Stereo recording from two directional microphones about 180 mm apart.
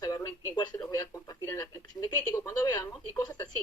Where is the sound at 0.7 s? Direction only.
10° left (ahead or behind).